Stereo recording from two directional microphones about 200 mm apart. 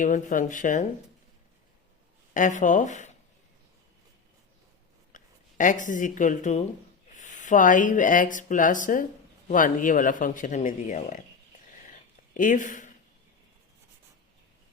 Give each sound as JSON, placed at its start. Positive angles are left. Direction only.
{"t": 0.0, "sound": "speech", "side_deg": 40}
{"t": 2.3, "sound": "speech", "side_deg": 40}
{"t": 5.1, "sound": "speech", "side_deg": 40}
{"t": 11.9, "sound": "a sound", "side_deg": 40}